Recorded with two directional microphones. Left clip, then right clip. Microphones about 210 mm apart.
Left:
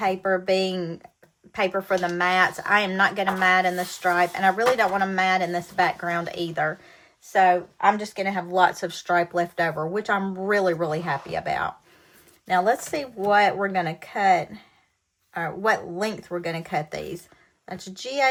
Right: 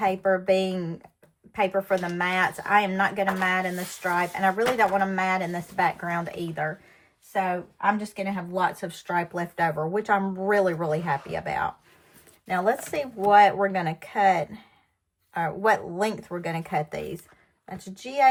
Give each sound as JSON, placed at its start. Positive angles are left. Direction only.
{"t": 0.0, "sound": "speech", "side_deg": 5}
{"t": 8.1, "sound": "speech", "side_deg": 30}
{"t": 9.0, "sound": "a woman's voice", "side_deg": 10}